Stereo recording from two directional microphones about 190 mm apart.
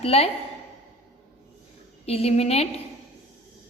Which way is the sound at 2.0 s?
30° left (ahead or behind).